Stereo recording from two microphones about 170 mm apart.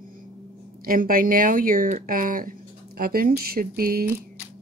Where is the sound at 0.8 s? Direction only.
55° right (ahead or behind).